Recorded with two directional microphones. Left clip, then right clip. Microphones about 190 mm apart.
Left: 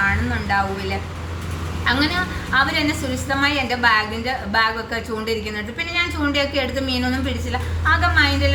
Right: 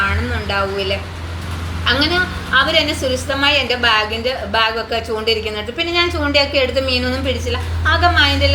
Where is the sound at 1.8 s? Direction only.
15° left (ahead or behind).